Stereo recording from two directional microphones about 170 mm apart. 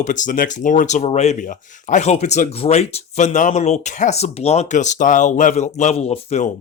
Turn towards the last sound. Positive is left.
turn(degrees=40)  # may be behind; listen again after turning